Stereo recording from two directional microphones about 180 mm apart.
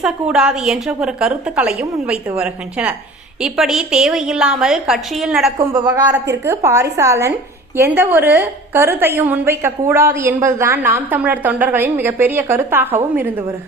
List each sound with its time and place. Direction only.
0.0 s a woman's voice: 5° right (ahead or behind)
5.5 s a woman's voice: 20° right (ahead or behind)